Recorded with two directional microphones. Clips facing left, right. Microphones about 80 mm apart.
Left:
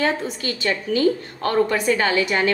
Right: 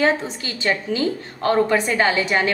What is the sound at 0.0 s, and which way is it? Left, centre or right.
A woman's voice, right.